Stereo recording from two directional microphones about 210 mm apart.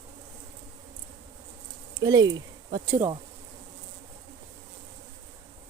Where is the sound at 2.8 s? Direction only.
10° right (ahead or behind).